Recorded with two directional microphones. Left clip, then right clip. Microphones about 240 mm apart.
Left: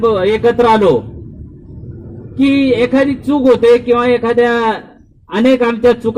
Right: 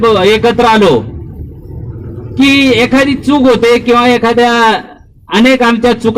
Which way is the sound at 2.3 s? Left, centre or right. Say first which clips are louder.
Right 5 dB; centre.